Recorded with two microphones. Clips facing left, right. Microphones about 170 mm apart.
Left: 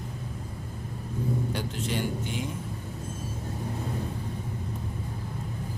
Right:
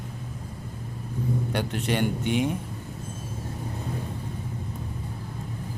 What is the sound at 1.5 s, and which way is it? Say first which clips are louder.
A man's voice: right 4 dB; 65° right (ahead or behind).